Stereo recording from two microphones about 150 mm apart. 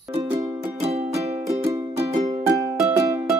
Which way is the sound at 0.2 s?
20° right (ahead or behind).